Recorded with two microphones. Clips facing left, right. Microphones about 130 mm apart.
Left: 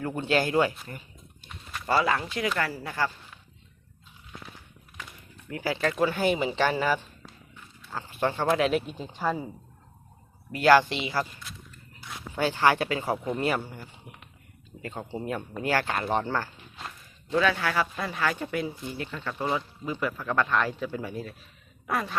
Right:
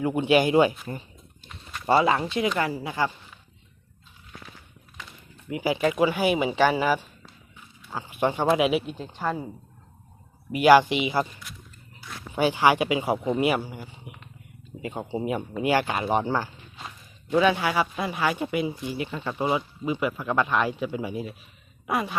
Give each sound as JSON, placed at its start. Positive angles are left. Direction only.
{"t": 0.0, "sound": "speech", "side_deg": -15}
{"t": 5.5, "sound": "speech", "side_deg": -15}
{"t": 8.9, "sound": "speech", "side_deg": 0}
{"t": 10.5, "sound": "speech", "side_deg": -15}
{"t": 12.3, "sound": "speech", "side_deg": -15}